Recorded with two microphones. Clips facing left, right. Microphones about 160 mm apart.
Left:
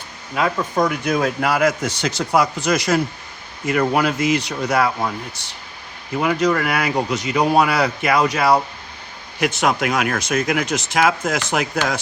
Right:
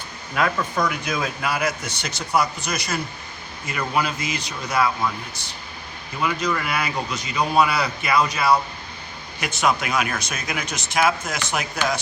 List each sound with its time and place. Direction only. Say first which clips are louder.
0.4 s speech: left 2 dB; 25° left (ahead or behind)
0.8 s speech: left 8 dB; 50° left (ahead or behind); by 3.0 s 90° left
3.7 s a man's voice: left 7 dB; 65° left (ahead or behind)
5.4 s a man's voice: right 1 dB; 85° left
6.1 s a man's voice: left 6 dB; 60° left (ahead or behind); by 11.9 s 90° left